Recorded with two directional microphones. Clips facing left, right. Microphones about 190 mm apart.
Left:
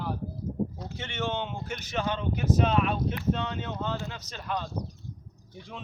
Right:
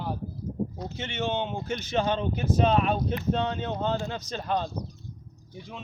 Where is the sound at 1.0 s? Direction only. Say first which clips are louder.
Right 2 dB; 20° right (ahead or behind).